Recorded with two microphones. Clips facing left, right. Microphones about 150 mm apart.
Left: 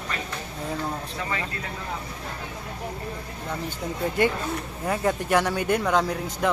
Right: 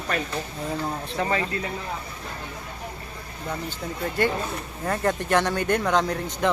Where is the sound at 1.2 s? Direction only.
40° right (ahead or behind).